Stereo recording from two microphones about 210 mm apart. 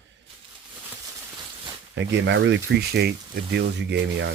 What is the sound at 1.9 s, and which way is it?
Speech, 60° right (ahead or behind).